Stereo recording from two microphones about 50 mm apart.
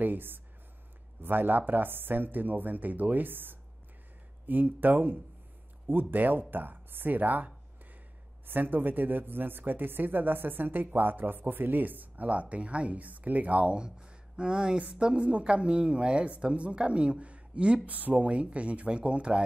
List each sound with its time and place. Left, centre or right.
0.0 s speech: right
17.8 s speech: right